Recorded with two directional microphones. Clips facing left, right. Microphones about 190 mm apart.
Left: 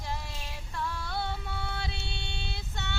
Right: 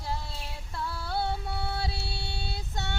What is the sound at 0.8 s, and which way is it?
Music, 35° right (ahead or behind).